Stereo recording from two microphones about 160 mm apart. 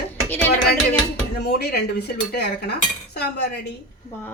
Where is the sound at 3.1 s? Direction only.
90° left.